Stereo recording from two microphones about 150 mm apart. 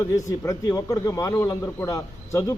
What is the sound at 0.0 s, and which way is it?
A man's voice, 20° left (ahead or behind).